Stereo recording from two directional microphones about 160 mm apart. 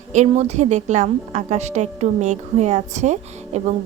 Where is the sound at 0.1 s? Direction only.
45° right (ahead or behind).